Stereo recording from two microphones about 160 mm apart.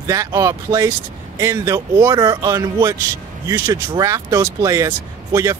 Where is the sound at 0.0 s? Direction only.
20° right (ahead or behind).